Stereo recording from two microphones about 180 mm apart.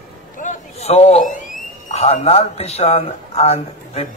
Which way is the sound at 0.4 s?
40° left (ahead or behind).